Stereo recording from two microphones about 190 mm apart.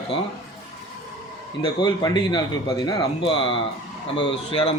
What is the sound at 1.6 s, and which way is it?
A man's voice, 25° left (ahead or behind).